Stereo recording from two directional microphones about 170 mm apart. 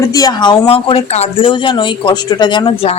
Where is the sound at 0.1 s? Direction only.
20° left (ahead or behind).